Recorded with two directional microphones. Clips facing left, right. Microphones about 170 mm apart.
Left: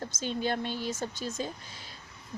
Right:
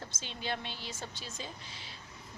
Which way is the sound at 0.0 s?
45° left (ahead or behind).